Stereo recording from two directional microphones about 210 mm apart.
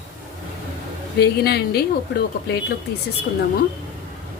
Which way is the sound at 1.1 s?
50° left (ahead or behind).